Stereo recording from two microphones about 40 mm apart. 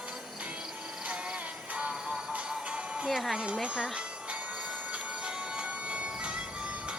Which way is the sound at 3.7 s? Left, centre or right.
Centre.